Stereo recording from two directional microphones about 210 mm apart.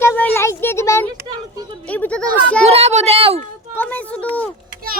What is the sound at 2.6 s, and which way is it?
Speech, 30° right (ahead or behind).